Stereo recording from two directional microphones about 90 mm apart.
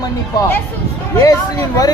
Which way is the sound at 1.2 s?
40° left (ahead or behind).